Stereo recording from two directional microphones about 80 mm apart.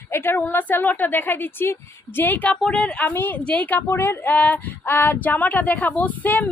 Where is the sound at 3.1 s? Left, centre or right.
Left.